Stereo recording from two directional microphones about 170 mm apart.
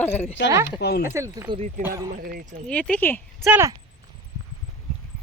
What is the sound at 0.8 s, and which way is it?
Speech, 75° left (ahead or behind).